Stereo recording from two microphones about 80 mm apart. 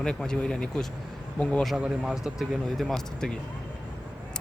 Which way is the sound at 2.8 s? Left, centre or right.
Centre.